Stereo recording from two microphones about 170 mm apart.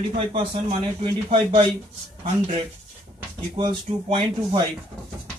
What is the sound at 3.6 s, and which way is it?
Speech, 25° right (ahead or behind).